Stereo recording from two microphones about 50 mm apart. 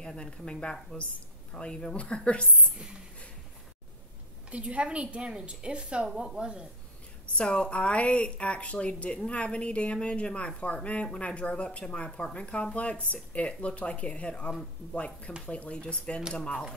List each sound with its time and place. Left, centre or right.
0.0 s a woman's voice: centre
4.5 s speech: right
7.3 s a woman's voice: left